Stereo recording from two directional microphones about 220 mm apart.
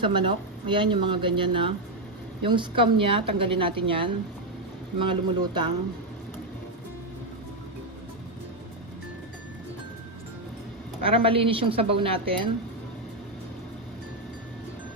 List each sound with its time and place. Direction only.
0.0 s speech: 20° right (ahead or behind)
11.2 s speech: 25° right (ahead or behind)